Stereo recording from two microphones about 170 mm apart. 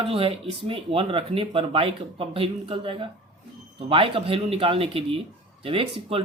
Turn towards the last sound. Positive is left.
turn(degrees=-35)  # may be behind; listen again after turning